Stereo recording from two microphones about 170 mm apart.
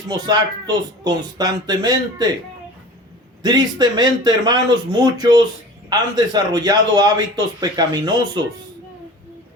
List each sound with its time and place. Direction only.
0.1 s a man's voice: 25° right (ahead or behind)
3.4 s a man's voice: 25° right (ahead or behind)